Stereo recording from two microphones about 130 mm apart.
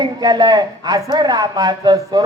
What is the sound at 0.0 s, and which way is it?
A man's voice, 35° right (ahead or behind).